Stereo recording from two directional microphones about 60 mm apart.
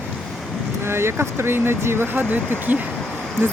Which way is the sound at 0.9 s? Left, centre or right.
Right.